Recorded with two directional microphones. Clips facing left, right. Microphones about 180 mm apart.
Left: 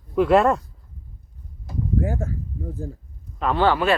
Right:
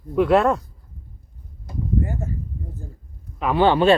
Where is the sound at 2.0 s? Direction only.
90° left.